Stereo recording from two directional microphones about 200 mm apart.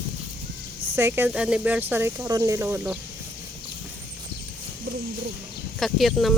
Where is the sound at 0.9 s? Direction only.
10° right (ahead or behind).